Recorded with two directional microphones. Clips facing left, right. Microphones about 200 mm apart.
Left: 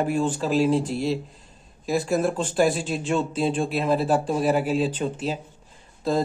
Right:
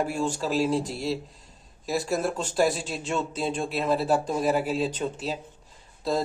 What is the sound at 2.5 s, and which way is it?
Speech, 5° left (ahead or behind).